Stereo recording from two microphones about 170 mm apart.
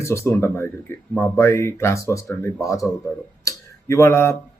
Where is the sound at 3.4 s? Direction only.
20° left (ahead or behind).